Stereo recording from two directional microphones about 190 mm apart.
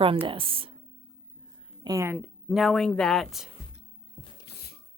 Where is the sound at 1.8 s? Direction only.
15° right (ahead or behind); by 3.5 s centre (ahead or behind).